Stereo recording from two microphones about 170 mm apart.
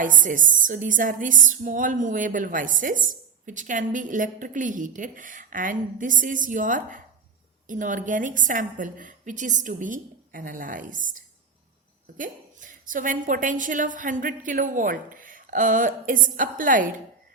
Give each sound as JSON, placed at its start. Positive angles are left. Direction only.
{"t": 0.0, "sound": "a woman's voice", "side_deg": -50}